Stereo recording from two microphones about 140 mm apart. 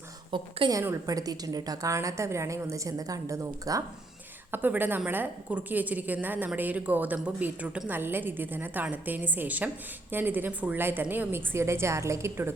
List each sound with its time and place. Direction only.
0.3 s a woman's voice: 35° right (ahead or behind)
0.7 s a woman's voice: 25° right (ahead or behind)